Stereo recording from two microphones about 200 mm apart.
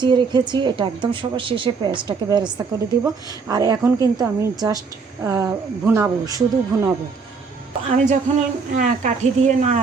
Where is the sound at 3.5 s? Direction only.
15° right (ahead or behind).